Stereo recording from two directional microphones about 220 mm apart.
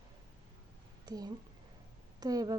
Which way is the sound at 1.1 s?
20° right (ahead or behind).